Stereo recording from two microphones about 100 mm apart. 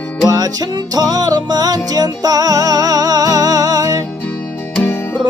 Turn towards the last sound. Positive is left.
turn(degrees=-40)  # may be behind; listen again after turning